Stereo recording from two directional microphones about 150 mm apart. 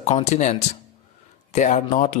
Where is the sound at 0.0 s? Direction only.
50° left (ahead or behind).